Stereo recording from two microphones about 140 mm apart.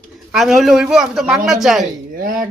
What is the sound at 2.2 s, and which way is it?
Speech, 75° right (ahead or behind).